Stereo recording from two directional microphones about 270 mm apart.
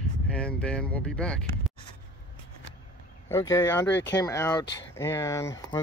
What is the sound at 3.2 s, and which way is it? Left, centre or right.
Speech, centre.